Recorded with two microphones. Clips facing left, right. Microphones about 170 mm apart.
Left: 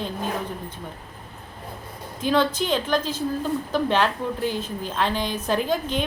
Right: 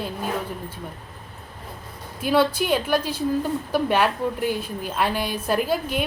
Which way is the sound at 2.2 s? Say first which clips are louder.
Right 1 dB; 10° right (ahead or behind).